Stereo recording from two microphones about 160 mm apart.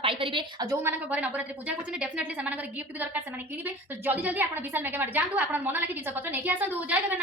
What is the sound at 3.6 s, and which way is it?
A woman's voice, 10° right (ahead or behind).